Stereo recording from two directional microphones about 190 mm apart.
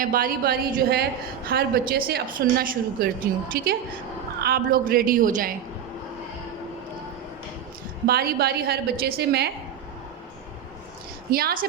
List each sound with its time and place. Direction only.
0.0 s speech: 50° right (ahead or behind)
8.0 s a woman's voice: 55° right (ahead or behind)
11.3 s speech: 50° right (ahead or behind)